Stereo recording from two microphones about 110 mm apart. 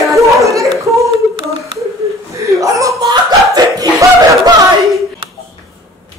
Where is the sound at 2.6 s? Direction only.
30° right (ahead or behind).